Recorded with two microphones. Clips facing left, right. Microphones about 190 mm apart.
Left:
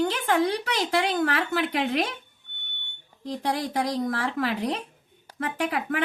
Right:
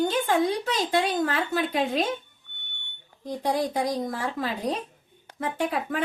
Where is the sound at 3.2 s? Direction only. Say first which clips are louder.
Right 2 dB; 70° left (ahead or behind).